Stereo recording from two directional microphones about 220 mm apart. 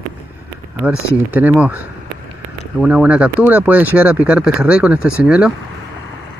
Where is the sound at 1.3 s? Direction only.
10° right (ahead or behind).